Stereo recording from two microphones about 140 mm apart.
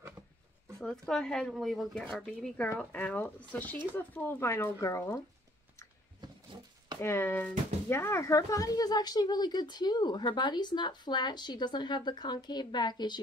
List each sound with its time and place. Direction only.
0.7 s speech: 5° left (ahead or behind); by 5.2 s 20° left (ahead or behind)
6.2 s a sound: 30° right (ahead or behind)
7.0 s speech: 15° left (ahead or behind)